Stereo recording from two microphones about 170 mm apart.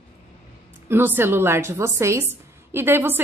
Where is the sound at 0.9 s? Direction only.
15° right (ahead or behind).